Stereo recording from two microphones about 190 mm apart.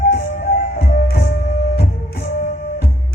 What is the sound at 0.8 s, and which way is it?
Music, 55° left (ahead or behind).